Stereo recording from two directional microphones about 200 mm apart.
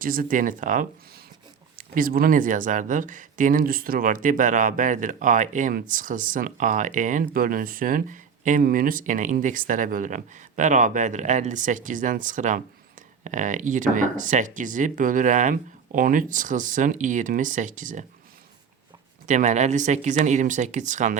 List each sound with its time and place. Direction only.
0.0 s speech: 45° right (ahead or behind)
2.0 s speech: 45° right (ahead or behind)
19.3 s speech: 35° right (ahead or behind)